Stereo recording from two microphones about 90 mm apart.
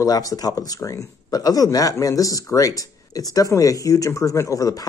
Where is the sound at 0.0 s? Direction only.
45° left (ahead or behind).